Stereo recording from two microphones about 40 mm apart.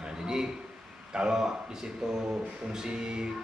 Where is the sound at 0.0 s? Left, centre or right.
Centre.